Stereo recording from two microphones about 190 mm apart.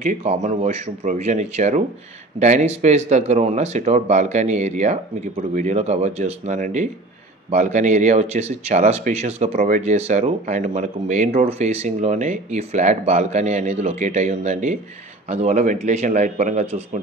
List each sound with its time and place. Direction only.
0.1 s speech: 35° right (ahead or behind)